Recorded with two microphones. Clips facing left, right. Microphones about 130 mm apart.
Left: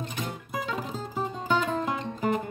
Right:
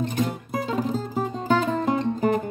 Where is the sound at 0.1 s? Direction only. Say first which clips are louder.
Right 8 dB; 40° right (ahead or behind).